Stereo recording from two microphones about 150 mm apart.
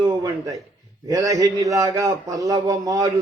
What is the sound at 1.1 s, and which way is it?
A man's voice, 25° right (ahead or behind).